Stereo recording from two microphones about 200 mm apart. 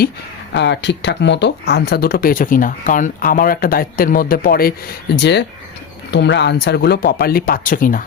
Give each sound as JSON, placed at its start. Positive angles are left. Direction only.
{"t": 0.5, "sound": "speech", "side_deg": 60}